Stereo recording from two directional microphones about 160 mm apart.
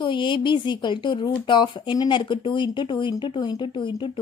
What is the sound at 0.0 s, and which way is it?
A woman's voice, 30° left (ahead or behind).